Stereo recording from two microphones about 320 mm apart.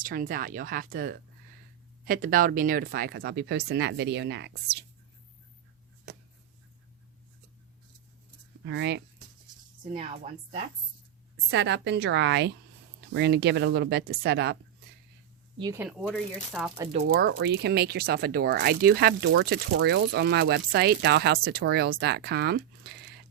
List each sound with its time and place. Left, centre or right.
0.0 s speech: right
8.6 s speech: right
9.9 s a woman's voice: centre
11.3 s speech: right
15.5 s speech: centre
17.0 s speech: right